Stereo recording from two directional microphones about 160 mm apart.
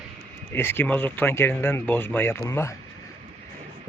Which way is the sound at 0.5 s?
15° left (ahead or behind).